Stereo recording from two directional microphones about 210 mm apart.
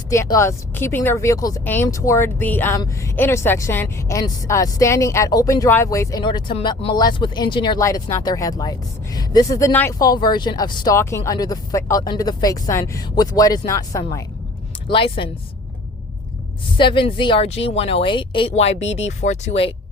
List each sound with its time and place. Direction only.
0.1 s speech: 15° left (ahead or behind)
16.7 s speech: 25° left (ahead or behind)